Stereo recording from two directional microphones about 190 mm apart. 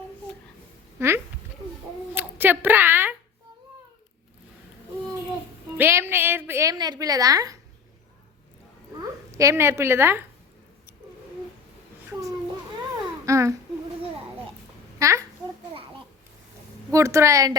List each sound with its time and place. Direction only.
0.9 s speech: 15° right (ahead or behind)
2.1 s a sound: 10° right (ahead or behind)
5.7 s a woman's voice: 10° right (ahead or behind)
9.0 s a woman's voice: 15° right (ahead or behind)
13.2 s a child's voice: 15° right (ahead or behind)
14.9 s babbling: 15° right (ahead or behind)
16.9 s a woman's voice: 15° right (ahead or behind)